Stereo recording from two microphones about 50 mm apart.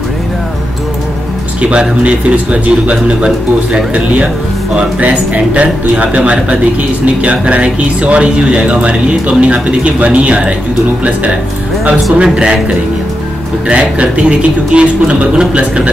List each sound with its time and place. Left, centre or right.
1.6 s speech: right
11.8 s speech: centre